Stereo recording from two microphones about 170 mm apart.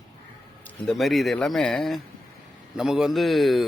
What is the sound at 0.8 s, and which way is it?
Mantra, centre (ahead or behind).